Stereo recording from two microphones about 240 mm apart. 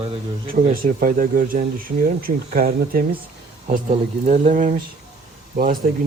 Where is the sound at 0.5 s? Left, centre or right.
Right.